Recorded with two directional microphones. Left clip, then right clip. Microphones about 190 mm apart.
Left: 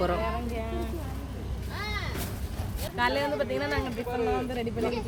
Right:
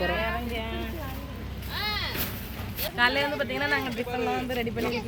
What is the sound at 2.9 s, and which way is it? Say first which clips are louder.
Speech: right 2 dB; 20° left (ahead or behind).